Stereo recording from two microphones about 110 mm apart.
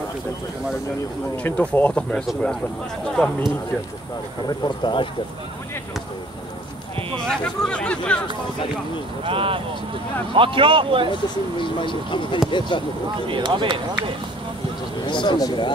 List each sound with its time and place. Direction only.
1.4 s speech: 15° left (ahead or behind)
4.5 s speech: 45° left (ahead or behind)
7.2 s speech: 10° left (ahead or behind)
9.2 s speech: 55° right (ahead or behind)
11.6 s speech: 50° left (ahead or behind)
13.3 s speech: 45° right (ahead or behind)
15.0 s speech: 45° left (ahead or behind)